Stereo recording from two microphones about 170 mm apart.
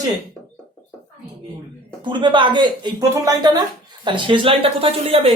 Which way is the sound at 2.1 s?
25° right (ahead or behind).